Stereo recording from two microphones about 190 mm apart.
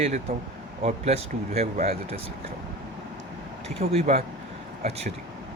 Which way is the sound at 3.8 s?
30° right (ahead or behind).